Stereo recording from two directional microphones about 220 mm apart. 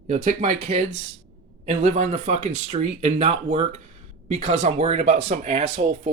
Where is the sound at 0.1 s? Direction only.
30° right (ahead or behind).